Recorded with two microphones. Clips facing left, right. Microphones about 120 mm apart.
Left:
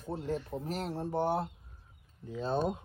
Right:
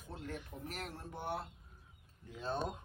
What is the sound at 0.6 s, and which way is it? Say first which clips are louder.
Speech: left 10 dB; 30° left (ahead or behind).